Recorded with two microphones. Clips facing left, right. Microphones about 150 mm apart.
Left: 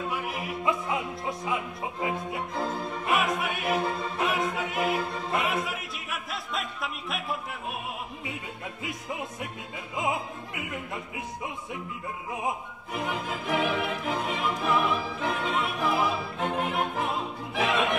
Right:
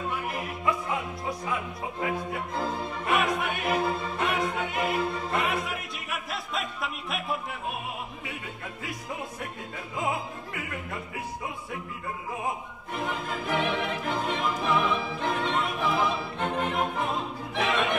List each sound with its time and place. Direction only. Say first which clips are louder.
0.1 s music: even; 5° left (ahead or behind)
1.4 s opera: left 1 dB; 20° left (ahead or behind)
2.1 s opera: even; centre (ahead or behind)
9.9 s opera: left 1 dB; 20° left (ahead or behind)
12.9 s opera: even; centre (ahead or behind)